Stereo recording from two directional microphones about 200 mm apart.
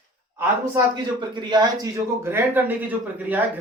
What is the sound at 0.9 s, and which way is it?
Speech, 20° right (ahead or behind).